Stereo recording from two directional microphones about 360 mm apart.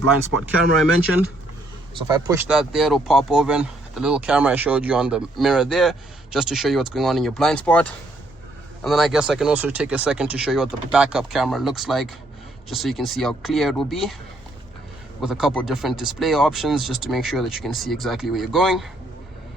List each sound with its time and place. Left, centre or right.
0.0 s speech: right
2.0 s speech: centre
15.2 s speech: centre